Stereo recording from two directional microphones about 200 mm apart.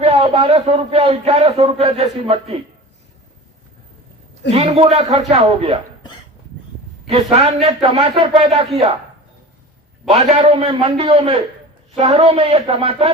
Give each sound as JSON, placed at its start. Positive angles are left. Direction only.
{"t": 0.0, "sound": "speech", "side_deg": -30}
{"t": 4.5, "sound": "a man's voice", "side_deg": -30}
{"t": 7.1, "sound": "speech", "side_deg": -30}
{"t": 10.1, "sound": "speech", "side_deg": -30}